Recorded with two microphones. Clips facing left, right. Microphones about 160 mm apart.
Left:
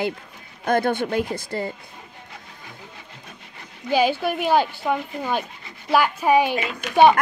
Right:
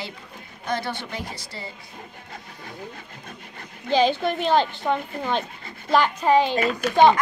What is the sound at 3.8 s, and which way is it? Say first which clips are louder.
A woman's voice: even; 10° left (ahead or behind).